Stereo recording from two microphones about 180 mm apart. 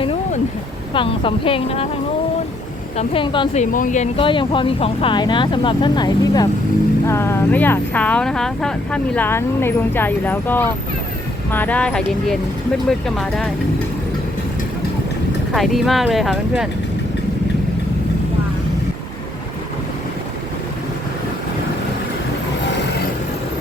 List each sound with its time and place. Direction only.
0.0 s a sound: 30° left (ahead or behind)
0.9 s speech: 30° left (ahead or behind)
3.0 s speech: 30° left (ahead or behind)
3.6 s speech: 45° left (ahead or behind)
4.2 s speech: 25° left (ahead or behind); by 13.5 s centre (ahead or behind)
15.5 s speech: centre (ahead or behind)